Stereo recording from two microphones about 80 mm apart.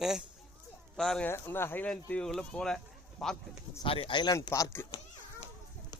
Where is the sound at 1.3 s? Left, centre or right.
Left.